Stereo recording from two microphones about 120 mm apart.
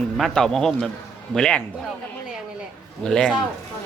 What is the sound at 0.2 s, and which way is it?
Speech, 5° left (ahead or behind).